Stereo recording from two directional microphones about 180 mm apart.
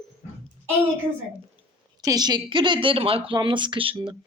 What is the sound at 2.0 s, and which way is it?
A woman's voice, 20° right (ahead or behind).